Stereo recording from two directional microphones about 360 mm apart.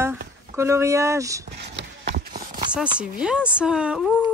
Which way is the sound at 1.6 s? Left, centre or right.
Right.